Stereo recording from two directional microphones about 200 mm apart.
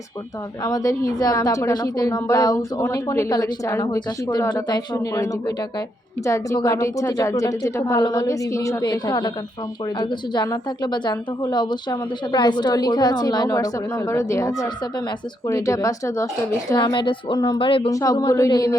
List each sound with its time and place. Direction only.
0.6 s a woman's voice: 20° left (ahead or behind)